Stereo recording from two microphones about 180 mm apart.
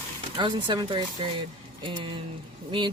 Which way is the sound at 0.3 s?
25° right (ahead or behind).